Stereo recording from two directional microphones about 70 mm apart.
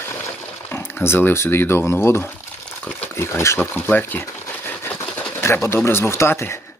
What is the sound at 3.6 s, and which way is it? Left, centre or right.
Speech, left.